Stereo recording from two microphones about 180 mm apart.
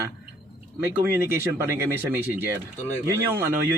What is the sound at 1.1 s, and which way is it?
Speech, 15° right (ahead or behind).